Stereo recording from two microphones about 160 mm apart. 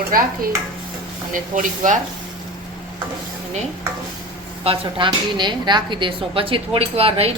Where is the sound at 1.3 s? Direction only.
55° right (ahead or behind).